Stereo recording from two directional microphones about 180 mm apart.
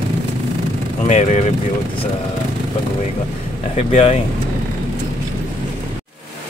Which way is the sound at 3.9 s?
35° left (ahead or behind).